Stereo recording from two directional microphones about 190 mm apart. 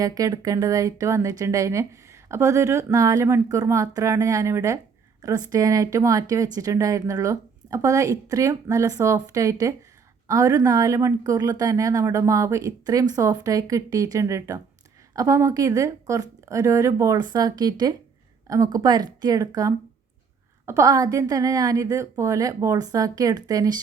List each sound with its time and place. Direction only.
0.0 s a woman's voice: 20° right (ahead or behind)